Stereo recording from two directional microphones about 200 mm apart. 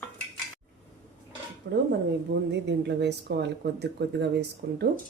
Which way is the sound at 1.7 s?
60° right (ahead or behind).